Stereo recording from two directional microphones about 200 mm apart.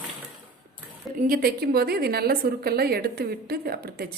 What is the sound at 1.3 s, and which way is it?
A woman's voice, 50° right (ahead or behind).